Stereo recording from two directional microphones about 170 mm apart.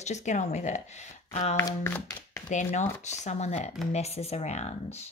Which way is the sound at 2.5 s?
45° left (ahead or behind).